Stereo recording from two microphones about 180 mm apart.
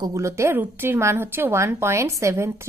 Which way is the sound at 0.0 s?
15° right (ahead or behind).